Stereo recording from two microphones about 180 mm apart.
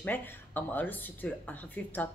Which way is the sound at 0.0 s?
10° left (ahead or behind).